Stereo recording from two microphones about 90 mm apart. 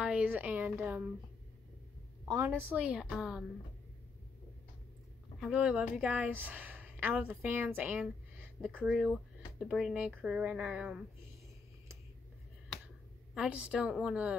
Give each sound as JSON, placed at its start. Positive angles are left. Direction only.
{"t": 0.0, "sound": "a woman's voice", "side_deg": -15}
{"t": 2.2, "sound": "a woman's voice", "side_deg": -40}
{"t": 2.7, "sound": "a woman's voice", "side_deg": -15}
{"t": 3.1, "sound": "a woman's voice", "side_deg": -5}
{"t": 5.5, "sound": "a woman's voice", "side_deg": -10}
{"t": 8.7, "sound": "speech", "side_deg": -10}
{"t": 9.9, "sound": "a woman's voice", "side_deg": -10}
{"t": 13.6, "sound": "a woman's voice", "side_deg": -15}